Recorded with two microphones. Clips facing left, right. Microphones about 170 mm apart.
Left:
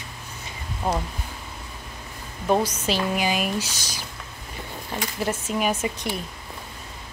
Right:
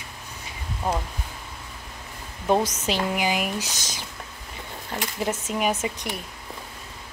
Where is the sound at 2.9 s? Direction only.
15° right (ahead or behind).